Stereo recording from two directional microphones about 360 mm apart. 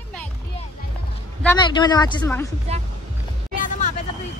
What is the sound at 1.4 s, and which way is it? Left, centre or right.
Speech, centre.